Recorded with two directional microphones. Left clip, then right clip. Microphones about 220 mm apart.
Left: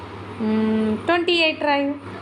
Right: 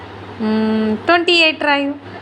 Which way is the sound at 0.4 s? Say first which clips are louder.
Right 4 dB; 10° right (ahead or behind).